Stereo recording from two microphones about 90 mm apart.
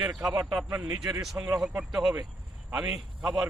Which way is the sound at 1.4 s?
35° right (ahead or behind).